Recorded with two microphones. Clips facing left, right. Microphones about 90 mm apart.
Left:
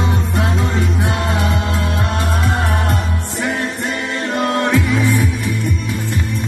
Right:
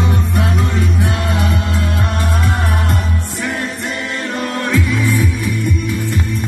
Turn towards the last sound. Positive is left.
turn(degrees=25)  # may be behind; listen again after turning